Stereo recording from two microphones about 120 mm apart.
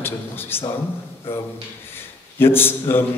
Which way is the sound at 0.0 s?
20° left (ahead or behind).